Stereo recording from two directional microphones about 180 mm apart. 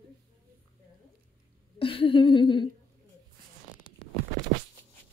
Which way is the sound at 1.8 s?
30° left (ahead or behind).